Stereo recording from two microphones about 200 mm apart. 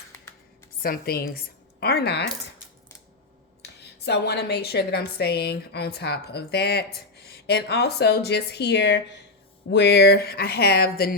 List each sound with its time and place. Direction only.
0.8 s speech: 50° left (ahead or behind)
3.6 s a woman's voice: 55° left (ahead or behind)